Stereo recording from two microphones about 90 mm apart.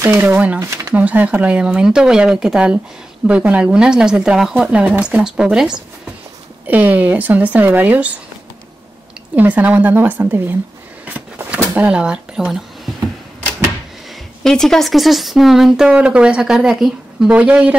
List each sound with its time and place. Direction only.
0.0 s speech: 25° right (ahead or behind)
0.6 s speech: 30° right (ahead or behind)
0.9 s speech: 20° right (ahead or behind)
4.6 s speech: 15° right (ahead or behind)
9.3 s speech: 20° right (ahead or behind)
11.1 s a sound: 15° right (ahead or behind)
14.4 s speech: 5° left (ahead or behind)
17.3 s speech: 15° right (ahead or behind)